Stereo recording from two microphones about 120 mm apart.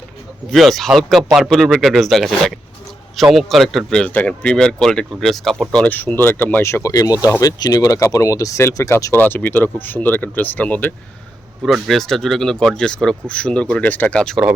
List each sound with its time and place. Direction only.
0.5 s speech: centre (ahead or behind)
3.3 s speech: centre (ahead or behind); by 9.1 s 25° left (ahead or behind)
9.1 s speech: 15° left (ahead or behind)
11.6 s speech: centre (ahead or behind)